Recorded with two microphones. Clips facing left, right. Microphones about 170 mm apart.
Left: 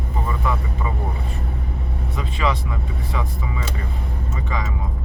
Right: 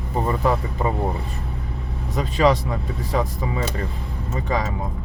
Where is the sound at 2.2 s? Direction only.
40° right (ahead or behind).